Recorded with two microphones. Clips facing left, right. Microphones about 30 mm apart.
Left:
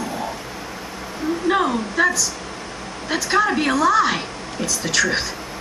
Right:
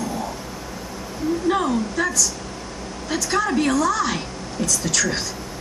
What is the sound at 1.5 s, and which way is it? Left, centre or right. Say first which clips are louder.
A woman's voice: left 3 dB; left.